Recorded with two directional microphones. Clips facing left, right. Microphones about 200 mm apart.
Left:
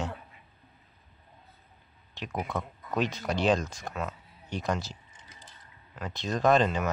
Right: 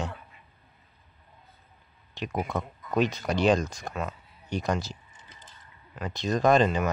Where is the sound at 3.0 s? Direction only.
Centre (ahead or behind).